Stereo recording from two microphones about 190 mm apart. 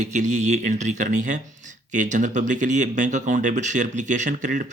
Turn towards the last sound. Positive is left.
turn(degrees=-40)  # may be behind; listen again after turning